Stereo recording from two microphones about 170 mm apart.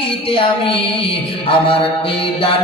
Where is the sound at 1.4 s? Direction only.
30° left (ahead or behind).